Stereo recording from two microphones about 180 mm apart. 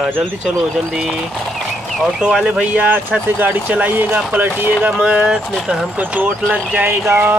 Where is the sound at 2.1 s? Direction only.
5° right (ahead or behind).